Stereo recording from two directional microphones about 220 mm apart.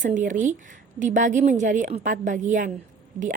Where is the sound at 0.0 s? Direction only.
35° right (ahead or behind).